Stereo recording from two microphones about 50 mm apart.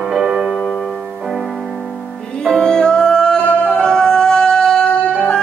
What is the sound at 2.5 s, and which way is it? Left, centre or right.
Music, centre.